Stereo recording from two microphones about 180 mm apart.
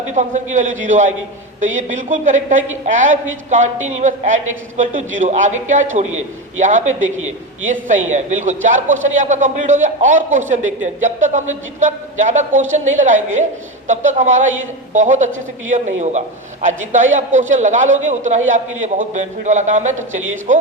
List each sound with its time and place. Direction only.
0.1 s a man's voice: 45° right (ahead or behind)